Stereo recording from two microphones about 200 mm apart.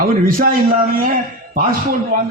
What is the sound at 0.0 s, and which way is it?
Speech, 45° right (ahead or behind).